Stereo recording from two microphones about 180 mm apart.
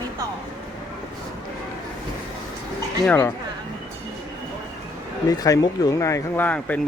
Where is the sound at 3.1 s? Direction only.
10° left (ahead or behind).